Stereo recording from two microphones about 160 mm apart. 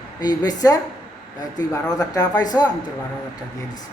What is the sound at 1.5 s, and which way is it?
A woman's voice, 25° left (ahead or behind).